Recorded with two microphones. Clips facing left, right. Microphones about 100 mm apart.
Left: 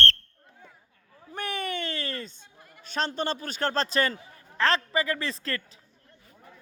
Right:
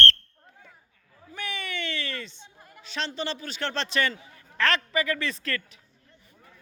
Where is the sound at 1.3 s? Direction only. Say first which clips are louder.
Left 3 dB; 45° left (ahead or behind).